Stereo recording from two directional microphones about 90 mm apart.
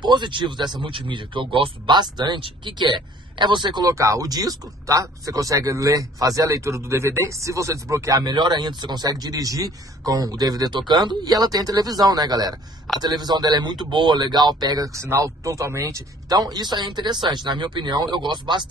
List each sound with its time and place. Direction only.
0.0 s speech: 60° right (ahead or behind)
3.8 s speech: 35° right (ahead or behind)
8.3 s speech: 55° right (ahead or behind)
9.2 s speech: 45° right (ahead or behind)